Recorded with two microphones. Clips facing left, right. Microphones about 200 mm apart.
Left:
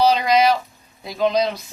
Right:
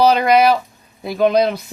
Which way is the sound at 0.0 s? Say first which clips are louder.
Right 4 dB; 60° right (ahead or behind).